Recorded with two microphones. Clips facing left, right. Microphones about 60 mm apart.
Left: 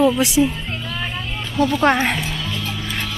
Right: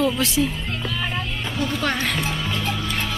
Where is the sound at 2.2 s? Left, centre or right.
Right.